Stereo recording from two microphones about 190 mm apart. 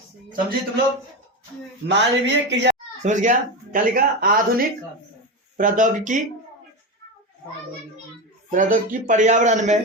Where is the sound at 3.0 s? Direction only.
40° right (ahead or behind).